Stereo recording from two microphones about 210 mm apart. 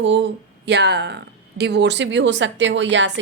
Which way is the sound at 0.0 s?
60° right (ahead or behind).